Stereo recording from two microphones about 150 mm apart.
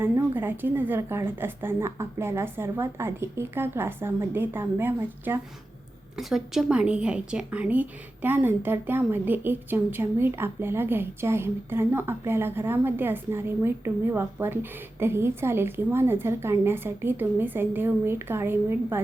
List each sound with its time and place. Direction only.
0.0 s a woman's voice: 15° right (ahead or behind)
6.1 s a woman's voice: centre (ahead or behind)